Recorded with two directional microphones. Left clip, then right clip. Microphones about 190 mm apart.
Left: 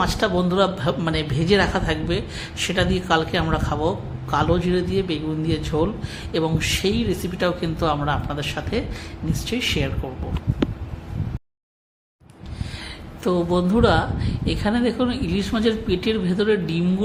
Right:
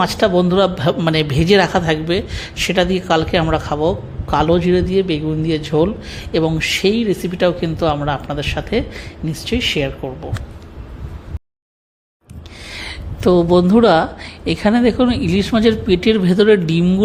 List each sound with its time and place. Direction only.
0.0 s a man's voice: 30° right (ahead or behind)
12.7 s a man's voice: 40° right (ahead or behind)